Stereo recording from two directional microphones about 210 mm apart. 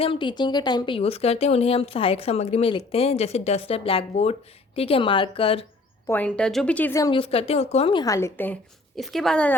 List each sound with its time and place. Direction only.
0.0 s speech: 25° left (ahead or behind)
6.1 s a woman's voice: 5° left (ahead or behind)